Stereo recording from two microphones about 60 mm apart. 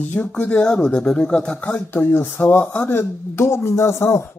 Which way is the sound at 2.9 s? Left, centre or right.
Left.